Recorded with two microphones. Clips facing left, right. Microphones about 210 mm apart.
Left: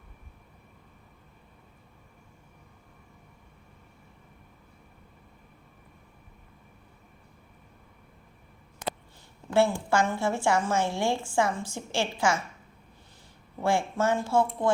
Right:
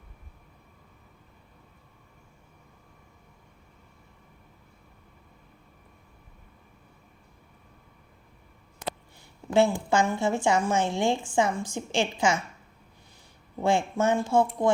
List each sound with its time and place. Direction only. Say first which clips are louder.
9.5 s a woman's voice: right 2 dB; 15° right (ahead or behind)
13.6 s speech: right 2 dB; 20° right (ahead or behind)